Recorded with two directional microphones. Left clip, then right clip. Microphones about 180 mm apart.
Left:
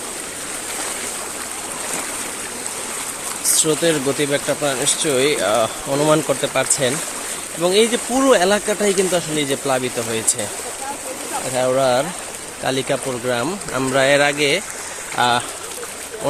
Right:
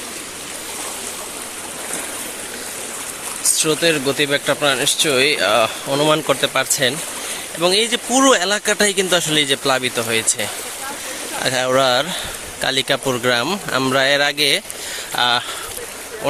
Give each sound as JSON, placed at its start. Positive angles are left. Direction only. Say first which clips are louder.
{"t": 3.5, "sound": "speech", "louder": "right 1 dB", "side_deg": 15}
{"t": 11.5, "sound": "speech", "louder": "even", "side_deg": -10}